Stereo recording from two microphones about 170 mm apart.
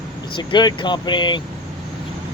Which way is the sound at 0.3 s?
25° left (ahead or behind).